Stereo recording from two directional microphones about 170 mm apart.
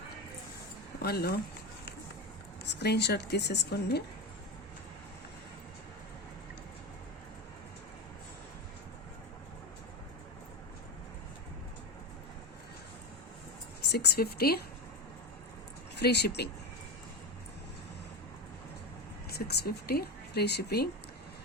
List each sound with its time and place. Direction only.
1.0 s speech: 65° left (ahead or behind)
2.6 s a woman's voice: 75° left (ahead or behind)
13.9 s a woman's voice: 70° left (ahead or behind)
16.0 s speech: 75° left (ahead or behind)
19.5 s speech: 65° left (ahead or behind)